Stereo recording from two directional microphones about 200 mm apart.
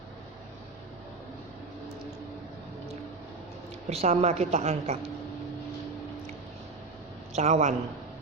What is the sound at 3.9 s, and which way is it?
A woman's voice, 35° right (ahead or behind).